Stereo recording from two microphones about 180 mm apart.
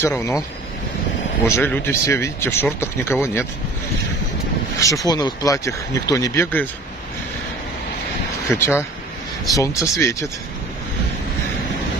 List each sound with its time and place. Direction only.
0.0 s speech: 15° left (ahead or behind)
1.5 s speech: 10° left (ahead or behind)
4.7 s speech: 20° left (ahead or behind)
8.5 s speech: 15° left (ahead or behind)